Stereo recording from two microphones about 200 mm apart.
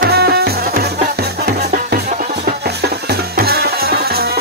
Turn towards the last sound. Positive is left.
turn(degrees=-50)  # may be behind; listen again after turning